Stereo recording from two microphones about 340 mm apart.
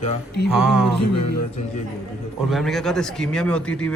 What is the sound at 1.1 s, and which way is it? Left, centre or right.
Music, left.